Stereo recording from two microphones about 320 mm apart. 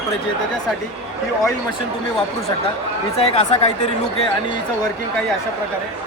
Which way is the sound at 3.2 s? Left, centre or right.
Centre.